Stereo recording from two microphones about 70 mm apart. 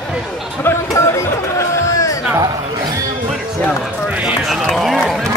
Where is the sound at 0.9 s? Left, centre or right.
Left.